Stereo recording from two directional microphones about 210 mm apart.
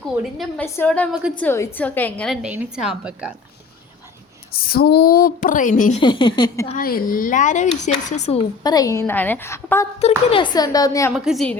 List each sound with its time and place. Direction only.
0.3 s a woman's voice: 5° left (ahead or behind)
4.6 s speech: 45° left (ahead or behind)
6.0 s speech: 20° left (ahead or behind)
6.7 s speech: 45° left (ahead or behind); by 9.8 s 10° left (ahead or behind)
10.0 s speech: 25° left (ahead or behind)
11.1 s a woman's voice: centre (ahead or behind)